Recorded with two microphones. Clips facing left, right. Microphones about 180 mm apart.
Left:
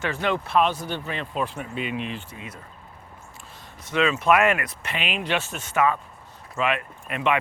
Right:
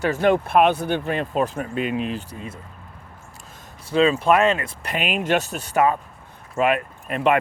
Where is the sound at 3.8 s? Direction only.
30° right (ahead or behind).